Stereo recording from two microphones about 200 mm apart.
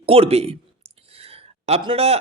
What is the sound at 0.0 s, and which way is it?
Speech, 30° right (ahead or behind).